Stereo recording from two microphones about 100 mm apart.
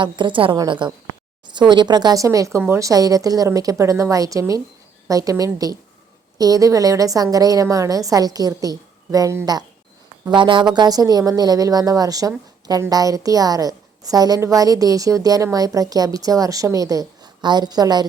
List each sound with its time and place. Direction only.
0.0 s a woman's voice: 55° right (ahead or behind); by 9.6 s 40° right (ahead or behind)
10.2 s a woman's voice: 50° right (ahead or behind)